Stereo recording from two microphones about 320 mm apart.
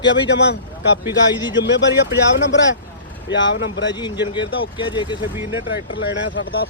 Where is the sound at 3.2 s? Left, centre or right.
Left.